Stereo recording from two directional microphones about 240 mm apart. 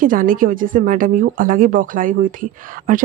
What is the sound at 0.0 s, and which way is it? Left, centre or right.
Speech, right.